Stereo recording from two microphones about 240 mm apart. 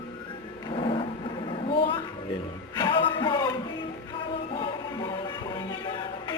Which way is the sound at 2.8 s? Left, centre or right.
Left.